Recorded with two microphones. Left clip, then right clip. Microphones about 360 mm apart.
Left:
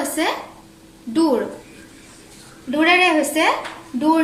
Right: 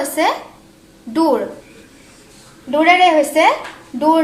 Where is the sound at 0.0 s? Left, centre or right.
Centre.